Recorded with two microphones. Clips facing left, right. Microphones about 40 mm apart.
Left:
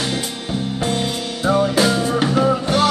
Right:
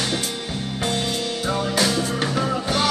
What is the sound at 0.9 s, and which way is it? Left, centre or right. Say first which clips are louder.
Music: left 2 dB; left.